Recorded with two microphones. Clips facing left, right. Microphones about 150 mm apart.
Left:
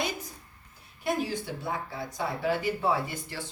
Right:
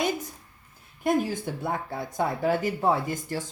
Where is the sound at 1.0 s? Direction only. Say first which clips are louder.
Right 5 dB; 50° right (ahead or behind).